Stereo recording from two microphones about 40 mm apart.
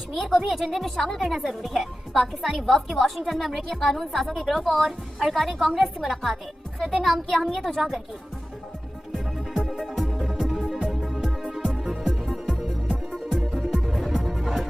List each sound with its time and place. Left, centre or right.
0.1 s a woman's voice: centre
9.6 s music: centre
12.6 s music: centre
13.3 s music: centre